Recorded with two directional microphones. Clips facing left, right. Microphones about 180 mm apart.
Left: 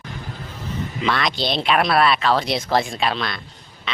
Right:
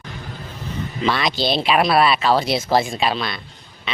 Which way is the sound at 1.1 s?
5° right (ahead or behind).